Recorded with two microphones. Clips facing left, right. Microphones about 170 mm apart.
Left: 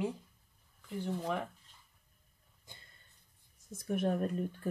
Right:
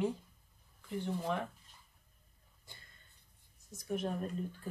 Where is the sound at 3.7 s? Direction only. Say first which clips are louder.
Left 4 dB; 55° left (ahead or behind).